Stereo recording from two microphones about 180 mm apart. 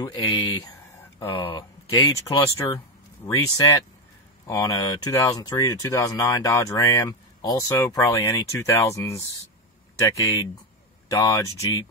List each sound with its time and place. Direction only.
0.0 s speech: 20° left (ahead or behind)